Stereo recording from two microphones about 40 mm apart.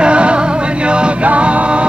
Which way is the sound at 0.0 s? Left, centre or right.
Right.